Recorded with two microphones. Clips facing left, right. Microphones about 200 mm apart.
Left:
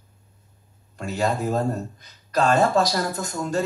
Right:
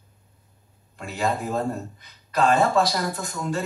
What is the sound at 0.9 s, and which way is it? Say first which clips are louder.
Speech: left 2 dB; 45° left (ahead or behind).